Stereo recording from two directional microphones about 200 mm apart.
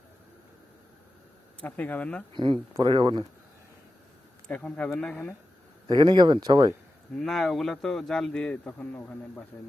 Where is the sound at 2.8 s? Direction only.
25° right (ahead or behind).